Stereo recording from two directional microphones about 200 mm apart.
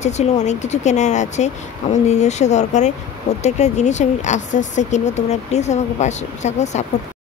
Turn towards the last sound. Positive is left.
turn(degrees=35)  # may be behind; listen again after turning